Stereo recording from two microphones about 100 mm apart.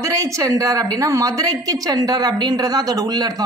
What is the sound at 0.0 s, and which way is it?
A woman's voice, 35° right (ahead or behind).